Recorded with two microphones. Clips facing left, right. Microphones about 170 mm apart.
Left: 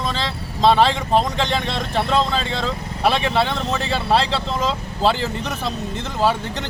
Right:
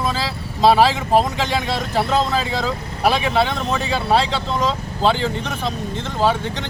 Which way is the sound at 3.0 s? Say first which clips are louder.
Right 1 dB; centre (ahead or behind).